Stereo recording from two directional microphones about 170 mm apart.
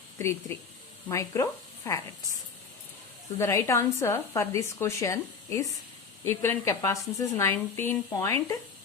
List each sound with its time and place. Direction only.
0.2 s a woman's voice: 15° left (ahead or behind)
3.3 s a woman's voice: 15° left (ahead or behind)